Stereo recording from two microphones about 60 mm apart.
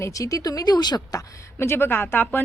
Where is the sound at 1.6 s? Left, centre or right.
Left.